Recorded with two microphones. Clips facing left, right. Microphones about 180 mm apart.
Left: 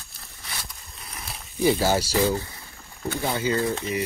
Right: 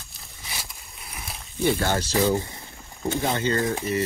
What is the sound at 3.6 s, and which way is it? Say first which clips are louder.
Speech: even; 15° right (ahead or behind).